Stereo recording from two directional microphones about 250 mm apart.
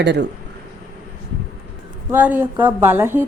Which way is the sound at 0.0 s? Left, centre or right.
Right.